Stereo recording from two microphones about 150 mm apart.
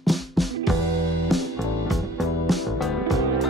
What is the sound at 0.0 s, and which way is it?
Music, centre (ahead or behind).